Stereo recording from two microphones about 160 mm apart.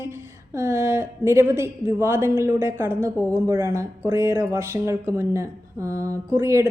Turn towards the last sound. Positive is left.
turn(degrees=-20)  # may be behind; listen again after turning